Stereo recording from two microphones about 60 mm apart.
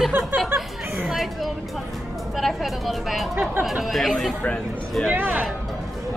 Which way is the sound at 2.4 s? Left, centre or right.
Centre.